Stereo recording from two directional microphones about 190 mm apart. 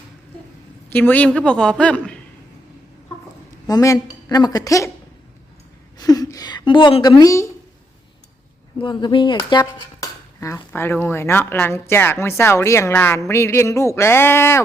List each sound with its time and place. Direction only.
0.9 s a woman's voice: 10° left (ahead or behind)
3.7 s a woman's voice: 15° left (ahead or behind)
6.0 s a woman's voice: 20° left (ahead or behind)
8.8 s a woman's voice: 25° left (ahead or behind)
9.5 s dishes: 20° left (ahead or behind)